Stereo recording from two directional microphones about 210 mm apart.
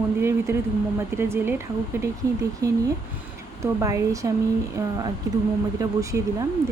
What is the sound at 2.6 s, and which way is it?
Speech, 15° right (ahead or behind).